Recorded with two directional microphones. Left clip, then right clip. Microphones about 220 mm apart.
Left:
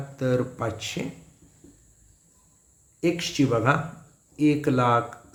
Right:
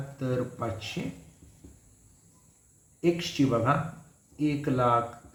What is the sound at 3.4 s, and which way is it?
Speech, 50° left (ahead or behind).